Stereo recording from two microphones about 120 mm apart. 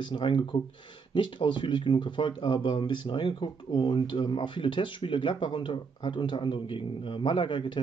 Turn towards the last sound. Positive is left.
turn(degrees=45)  # may be behind; listen again after turning